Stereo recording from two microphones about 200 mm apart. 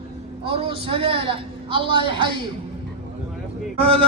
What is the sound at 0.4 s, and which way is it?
A man's voice, 30° right (ahead or behind).